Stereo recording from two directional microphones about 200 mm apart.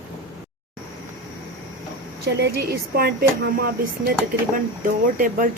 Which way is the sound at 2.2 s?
50° right (ahead or behind).